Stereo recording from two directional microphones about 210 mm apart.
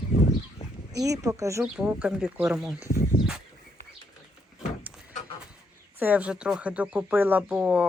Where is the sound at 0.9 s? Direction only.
15° right (ahead or behind).